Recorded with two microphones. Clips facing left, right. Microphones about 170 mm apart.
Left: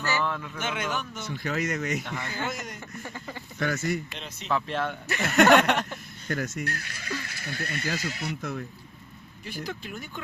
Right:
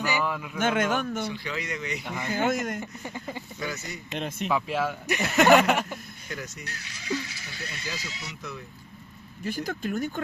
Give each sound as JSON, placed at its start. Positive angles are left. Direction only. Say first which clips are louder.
{"t": 0.0, "sound": "a sound", "louder": "right 1 dB", "side_deg": -10}
{"t": 0.6, "sound": "speech", "louder": "right 8 dB", "side_deg": -50}
{"t": 1.3, "sound": "speech", "louder": "left 4 dB", "side_deg": 45}
{"t": 2.0, "sound": "speech", "louder": "right 5 dB", "side_deg": -15}
{"t": 2.5, "sound": "speech", "louder": "right 8 dB", "side_deg": -50}
{"t": 2.8, "sound": "speech", "louder": "right 2 dB", "side_deg": -15}
{"t": 3.6, "sound": "speech", "louder": "left 10 dB", "side_deg": 50}
{"t": 4.2, "sound": "speech", "louder": "right 10 dB", "side_deg": -55}
{"t": 4.4, "sound": "speech", "louder": "even", "side_deg": -10}
{"t": 5.2, "sound": "a sound", "louder": "even", "side_deg": 0}
{"t": 6.2, "sound": "speech", "louder": "left 9 dB", "side_deg": 50}
{"t": 9.4, "sound": "speech", "louder": "right 6 dB", "side_deg": -45}